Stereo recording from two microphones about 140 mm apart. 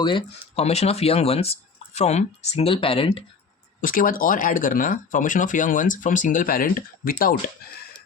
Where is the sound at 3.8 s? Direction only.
80° left.